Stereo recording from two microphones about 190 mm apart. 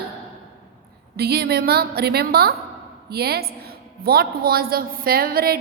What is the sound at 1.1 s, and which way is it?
A woman's voice, 55° right (ahead or behind).